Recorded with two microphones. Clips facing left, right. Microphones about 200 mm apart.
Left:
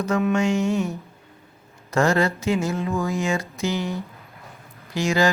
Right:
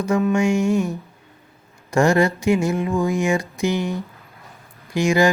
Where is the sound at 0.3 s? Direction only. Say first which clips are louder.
Right 3 dB; 10° right (ahead or behind).